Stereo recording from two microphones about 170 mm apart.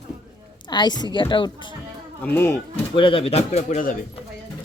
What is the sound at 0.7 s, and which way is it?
Speech, 25° left (ahead or behind).